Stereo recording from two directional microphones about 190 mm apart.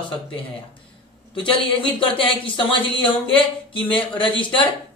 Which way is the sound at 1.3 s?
25° left (ahead or behind).